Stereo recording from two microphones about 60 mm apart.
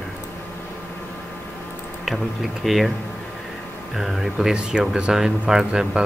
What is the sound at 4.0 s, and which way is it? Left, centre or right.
Speech, centre.